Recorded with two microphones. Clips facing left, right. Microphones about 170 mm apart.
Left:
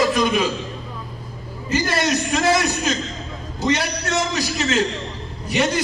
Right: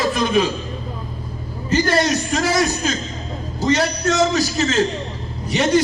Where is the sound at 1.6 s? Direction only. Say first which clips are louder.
Right 4 dB; 30° right (ahead or behind).